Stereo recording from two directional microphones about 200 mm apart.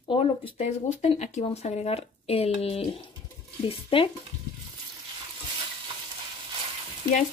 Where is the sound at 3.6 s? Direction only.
25° left (ahead or behind).